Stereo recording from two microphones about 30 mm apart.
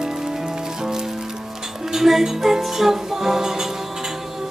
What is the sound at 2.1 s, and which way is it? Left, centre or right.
Music, centre.